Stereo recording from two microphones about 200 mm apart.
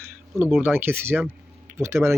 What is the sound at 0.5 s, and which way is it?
Speech, 10° right (ahead or behind).